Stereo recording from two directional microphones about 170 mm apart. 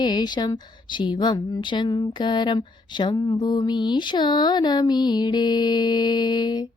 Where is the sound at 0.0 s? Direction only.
25° left (ahead or behind).